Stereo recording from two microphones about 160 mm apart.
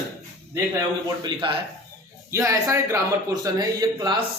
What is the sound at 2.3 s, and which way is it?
Speech, 20° right (ahead or behind).